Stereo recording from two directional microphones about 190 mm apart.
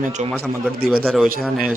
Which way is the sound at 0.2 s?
35° right (ahead or behind).